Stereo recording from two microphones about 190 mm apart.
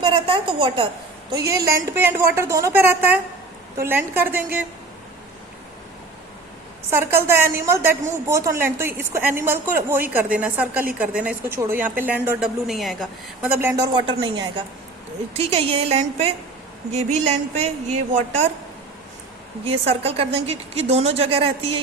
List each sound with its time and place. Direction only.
0.0 s a woman's voice: 25° right (ahead or behind); by 4.6 s 10° right (ahead or behind)
6.9 s a woman's voice: 10° right (ahead or behind)
13.6 s a woman's voice: 15° right (ahead or behind)
13.9 s a woman's voice: 25° right (ahead or behind)
19.6 s a woman's voice: 30° right (ahead or behind)